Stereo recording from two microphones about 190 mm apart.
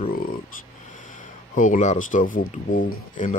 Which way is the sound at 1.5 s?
45° left (ahead or behind).